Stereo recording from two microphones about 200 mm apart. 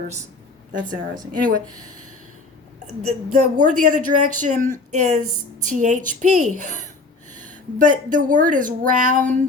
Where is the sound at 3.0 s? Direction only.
40° right (ahead or behind).